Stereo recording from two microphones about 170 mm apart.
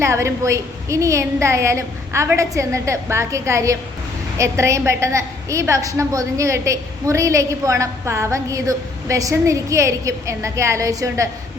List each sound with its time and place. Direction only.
0.0 s a woman's voice: 15° right (ahead or behind)